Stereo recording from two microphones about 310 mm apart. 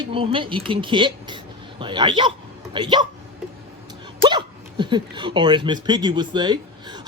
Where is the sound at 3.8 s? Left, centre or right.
Centre.